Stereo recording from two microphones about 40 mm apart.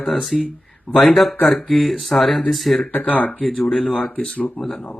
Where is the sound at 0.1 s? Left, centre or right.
Centre.